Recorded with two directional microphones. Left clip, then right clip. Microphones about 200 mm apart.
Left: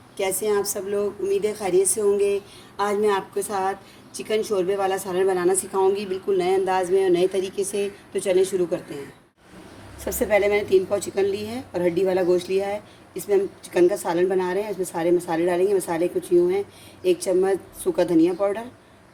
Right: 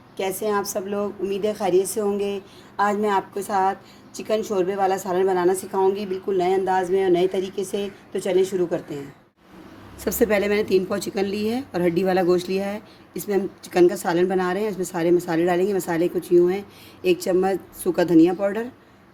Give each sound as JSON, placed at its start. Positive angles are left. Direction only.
{"t": 0.2, "sound": "speech", "side_deg": -25}
{"t": 10.0, "sound": "a woman's voice", "side_deg": -55}